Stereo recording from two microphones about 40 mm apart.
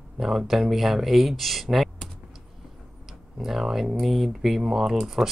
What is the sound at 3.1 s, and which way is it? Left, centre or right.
Speech, centre.